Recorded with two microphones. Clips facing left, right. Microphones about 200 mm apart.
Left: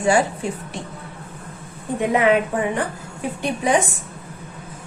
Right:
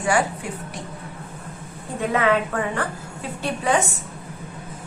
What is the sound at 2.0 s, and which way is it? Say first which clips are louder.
A woman's voice: left 3 dB; 15° left (ahead or behind).